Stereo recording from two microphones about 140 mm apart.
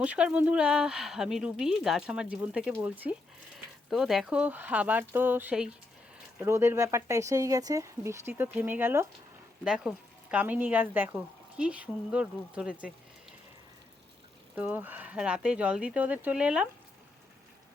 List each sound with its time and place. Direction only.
0.0 s speech: 10° right (ahead or behind)
6.4 s speech: 20° right (ahead or behind)
9.6 s speech: 5° right (ahead or behind)
14.5 s speech: 10° right (ahead or behind)